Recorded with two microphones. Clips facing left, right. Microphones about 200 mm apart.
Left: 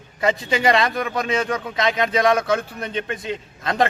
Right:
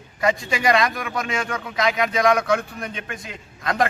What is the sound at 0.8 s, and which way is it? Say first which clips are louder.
A man's voice: left 2 dB; 20° left (ahead or behind).